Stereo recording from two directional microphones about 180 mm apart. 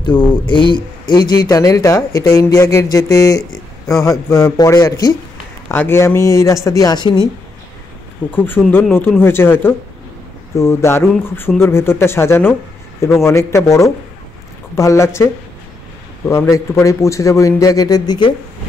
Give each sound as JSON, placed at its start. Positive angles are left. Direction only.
{"t": 0.0, "sound": "a man's voice", "side_deg": 25}
{"t": 8.2, "sound": "speech", "side_deg": -5}
{"t": 8.6, "sound": "a man's voice", "side_deg": 10}
{"t": 16.3, "sound": "a man's voice", "side_deg": 15}